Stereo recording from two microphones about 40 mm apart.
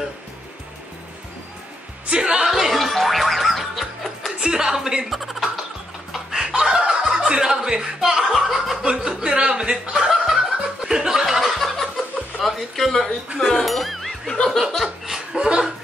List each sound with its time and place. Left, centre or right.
2.0 s music: right
2.4 s music: centre
4.4 s a woman's voice: centre
5.1 s speech: centre
6.1 s chicken: centre
7.2 s chuckle: centre
8.8 s speech: centre
10.0 s snicker: centre
12.4 s a sound: centre
13.4 s speech: centre
13.7 s music: centre
14.2 s laughter: centre
15.3 s chuckle: centre